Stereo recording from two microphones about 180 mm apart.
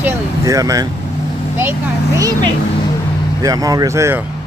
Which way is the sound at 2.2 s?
20° right (ahead or behind).